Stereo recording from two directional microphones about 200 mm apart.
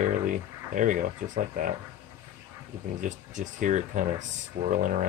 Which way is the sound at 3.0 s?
40° right (ahead or behind).